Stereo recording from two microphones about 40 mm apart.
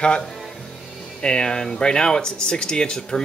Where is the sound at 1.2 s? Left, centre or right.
Centre.